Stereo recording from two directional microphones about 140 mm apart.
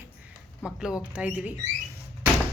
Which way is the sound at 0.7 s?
5° right (ahead or behind).